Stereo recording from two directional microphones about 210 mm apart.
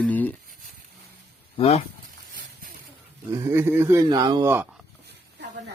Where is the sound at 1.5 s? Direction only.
30° left (ahead or behind).